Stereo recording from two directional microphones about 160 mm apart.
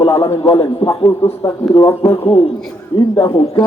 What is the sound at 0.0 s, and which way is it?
Radio, 35° left (ahead or behind).